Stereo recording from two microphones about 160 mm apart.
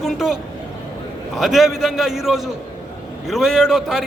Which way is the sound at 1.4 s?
Centre (ahead or behind).